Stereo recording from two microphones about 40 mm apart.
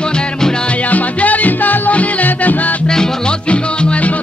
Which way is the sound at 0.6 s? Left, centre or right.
Left.